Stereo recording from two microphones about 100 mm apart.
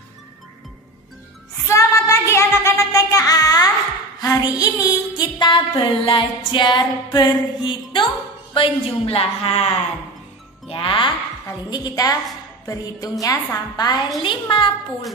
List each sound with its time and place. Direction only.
1.7 s music: 30° left (ahead or behind)
5.7 s music: 60° left (ahead or behind)
8.5 s a woman's voice: 65° left (ahead or behind)
10.7 s speech: 65° left (ahead or behind)
11.7 s music: 40° left (ahead or behind)
14.2 s speech: 55° left (ahead or behind)